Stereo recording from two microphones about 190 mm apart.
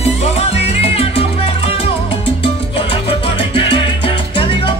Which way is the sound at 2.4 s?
30° left (ahead or behind).